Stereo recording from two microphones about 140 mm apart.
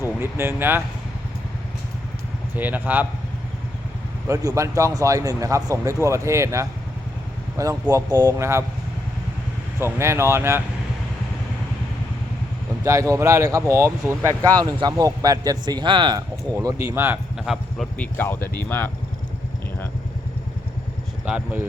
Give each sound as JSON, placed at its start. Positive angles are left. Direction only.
{"t": 0.0, "sound": "speech", "side_deg": -15}
{"t": 2.6, "sound": "speech", "side_deg": -15}
{"t": 4.3, "sound": "speech", "side_deg": -20}
{"t": 9.8, "sound": "speech", "side_deg": -20}
{"t": 12.8, "sound": "speech", "side_deg": -20}
{"t": 16.6, "sound": "speech", "side_deg": -20}
{"t": 17.3, "sound": "a man's voice", "side_deg": 0}
{"t": 17.9, "sound": "speech", "side_deg": 10}
{"t": 21.2, "sound": "speech", "side_deg": -10}